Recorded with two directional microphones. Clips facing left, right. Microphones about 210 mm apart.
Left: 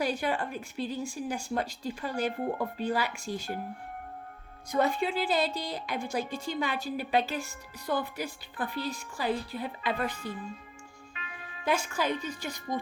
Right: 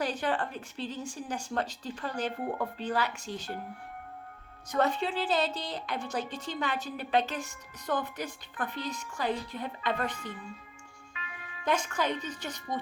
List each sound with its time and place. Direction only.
0.0 s a woman's voice: 10° left (ahead or behind)
4.7 s a woman's voice: 10° left (ahead or behind)
11.1 s music: 35° left (ahead or behind)
11.6 s a woman's voice: 10° left (ahead or behind)